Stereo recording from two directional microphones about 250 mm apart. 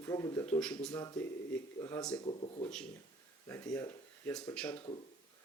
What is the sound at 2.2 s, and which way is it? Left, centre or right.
Speech, left.